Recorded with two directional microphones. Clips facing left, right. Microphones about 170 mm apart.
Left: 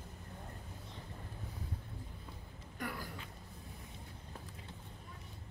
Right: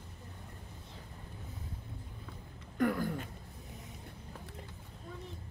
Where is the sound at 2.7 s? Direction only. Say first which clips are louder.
Right 12 dB; 50° right (ahead or behind).